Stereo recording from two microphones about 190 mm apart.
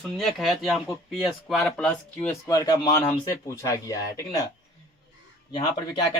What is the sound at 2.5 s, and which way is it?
Speech, 20° left (ahead or behind).